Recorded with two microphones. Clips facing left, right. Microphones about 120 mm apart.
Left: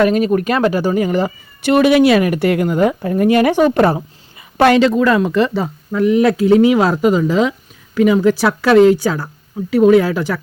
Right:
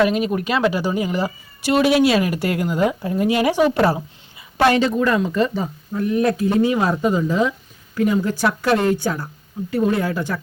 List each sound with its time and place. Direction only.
0.0 s speech: 45° left (ahead or behind)
4.4 s a sound: 55° left (ahead or behind)
4.7 s speech: 90° left